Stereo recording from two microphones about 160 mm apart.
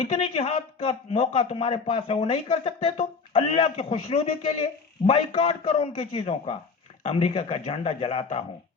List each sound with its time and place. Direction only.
0.0 s speech: 35° left (ahead or behind)